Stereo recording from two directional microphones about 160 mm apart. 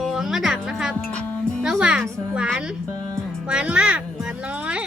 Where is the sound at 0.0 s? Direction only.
5° right (ahead or behind).